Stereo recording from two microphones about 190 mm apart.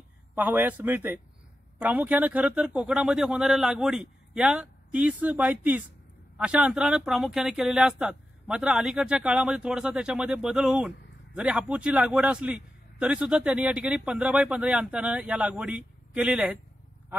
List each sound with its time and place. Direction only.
0.3 s a man's voice: 10° right (ahead or behind)